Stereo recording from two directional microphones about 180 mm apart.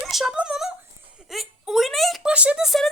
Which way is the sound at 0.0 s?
Centre (ahead or behind).